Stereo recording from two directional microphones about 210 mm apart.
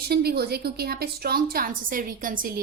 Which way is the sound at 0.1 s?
50° right (ahead or behind).